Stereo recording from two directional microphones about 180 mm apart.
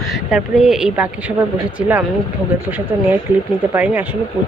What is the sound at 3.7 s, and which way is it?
Speech, 10° right (ahead or behind).